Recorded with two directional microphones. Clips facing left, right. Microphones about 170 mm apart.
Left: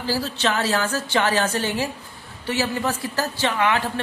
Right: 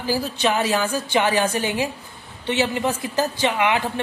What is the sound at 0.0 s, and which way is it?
Speech, 15° right (ahead or behind).